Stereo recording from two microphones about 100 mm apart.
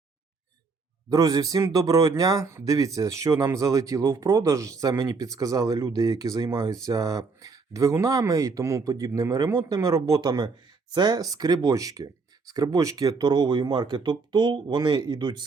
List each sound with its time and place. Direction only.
1.1 s a man's voice: 35° right (ahead or behind)